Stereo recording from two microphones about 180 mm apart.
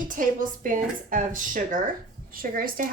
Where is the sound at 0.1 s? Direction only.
50° right (ahead or behind).